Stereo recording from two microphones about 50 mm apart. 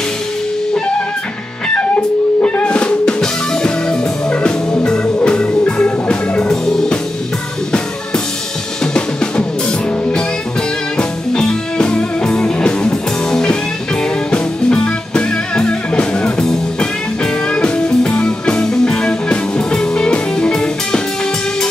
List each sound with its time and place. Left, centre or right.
2.4 s music: left
8.9 s music: centre